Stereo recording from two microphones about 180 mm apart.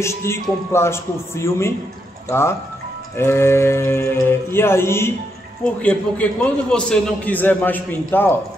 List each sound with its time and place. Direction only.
0.0 s a man's voice: 15° left (ahead or behind)